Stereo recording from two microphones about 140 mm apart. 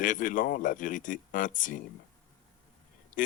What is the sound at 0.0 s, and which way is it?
Speech, 70° left (ahead or behind).